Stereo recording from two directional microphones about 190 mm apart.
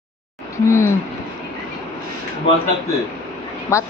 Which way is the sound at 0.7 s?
15° left (ahead or behind).